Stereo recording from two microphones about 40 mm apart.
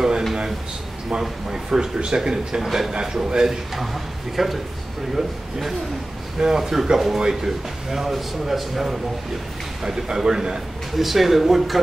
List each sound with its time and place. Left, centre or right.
1.5 s speech: centre
2.6 s a man's voice: centre
2.9 s speech: centre
3.7 s a man's voice: centre
11.0 s a man's voice: centre